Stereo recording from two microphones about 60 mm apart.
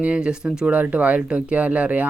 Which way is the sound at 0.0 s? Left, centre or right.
Centre.